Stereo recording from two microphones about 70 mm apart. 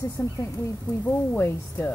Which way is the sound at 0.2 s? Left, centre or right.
Left.